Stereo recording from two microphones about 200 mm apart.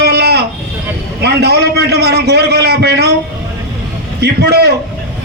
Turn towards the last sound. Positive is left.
turn(degrees=-55)  # may be behind; listen again after turning